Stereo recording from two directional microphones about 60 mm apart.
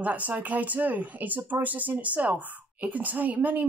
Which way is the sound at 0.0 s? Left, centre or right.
Right.